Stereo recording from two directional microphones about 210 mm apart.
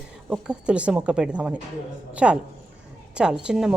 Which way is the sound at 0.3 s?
5° right (ahead or behind).